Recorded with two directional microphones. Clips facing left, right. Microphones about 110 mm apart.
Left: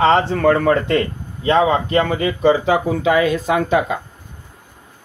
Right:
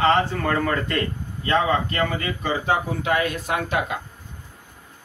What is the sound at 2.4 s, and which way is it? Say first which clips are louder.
Speech: left 9 dB; 90° left.